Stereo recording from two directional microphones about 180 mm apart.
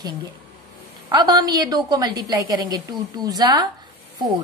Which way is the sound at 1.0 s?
25° right (ahead or behind).